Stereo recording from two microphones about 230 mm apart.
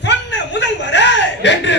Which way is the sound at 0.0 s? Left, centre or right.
Left.